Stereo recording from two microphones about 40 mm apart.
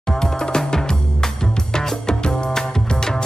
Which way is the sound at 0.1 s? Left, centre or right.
Centre.